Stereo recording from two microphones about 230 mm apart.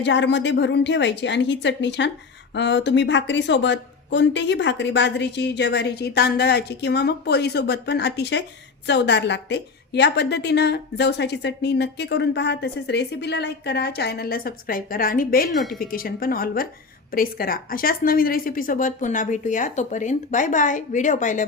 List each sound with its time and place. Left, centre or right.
0.0 s a woman's voice: left